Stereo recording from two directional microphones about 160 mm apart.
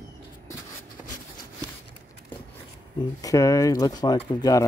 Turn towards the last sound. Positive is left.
turn(degrees=20)  # may be behind; listen again after turning